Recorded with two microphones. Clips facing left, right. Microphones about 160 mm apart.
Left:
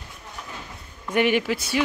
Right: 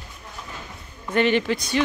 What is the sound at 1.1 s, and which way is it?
Speech, 10° left (ahead or behind).